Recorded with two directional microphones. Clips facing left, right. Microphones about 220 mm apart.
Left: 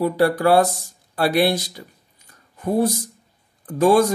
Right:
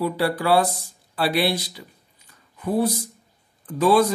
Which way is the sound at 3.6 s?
45° left (ahead or behind).